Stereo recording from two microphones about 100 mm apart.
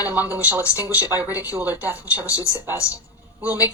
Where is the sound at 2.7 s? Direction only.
30° left (ahead or behind).